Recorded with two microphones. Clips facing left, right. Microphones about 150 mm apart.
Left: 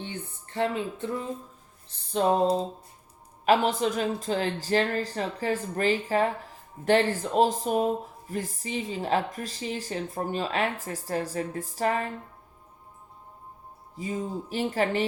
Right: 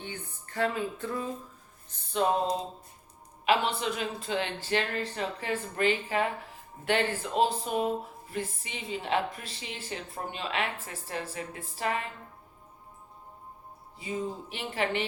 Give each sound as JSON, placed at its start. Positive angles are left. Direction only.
{"t": 0.0, "sound": "speech", "side_deg": 25}
{"t": 1.9, "sound": "speech", "side_deg": 40}
{"t": 13.9, "sound": "speech", "side_deg": 40}